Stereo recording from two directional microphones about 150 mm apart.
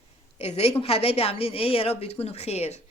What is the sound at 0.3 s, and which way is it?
A woman's voice, 45° left (ahead or behind).